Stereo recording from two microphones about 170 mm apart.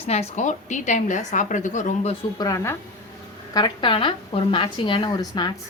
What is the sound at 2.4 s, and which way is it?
Speech, 20° left (ahead or behind).